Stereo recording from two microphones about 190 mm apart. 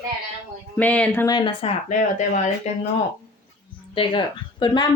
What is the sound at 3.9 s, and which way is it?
Speech, 25° left (ahead or behind).